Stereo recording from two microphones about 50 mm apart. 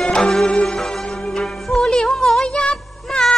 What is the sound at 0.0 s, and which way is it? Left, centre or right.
Music, centre.